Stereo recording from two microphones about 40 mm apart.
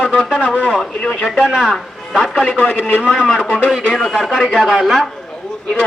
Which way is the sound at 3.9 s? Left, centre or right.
Centre.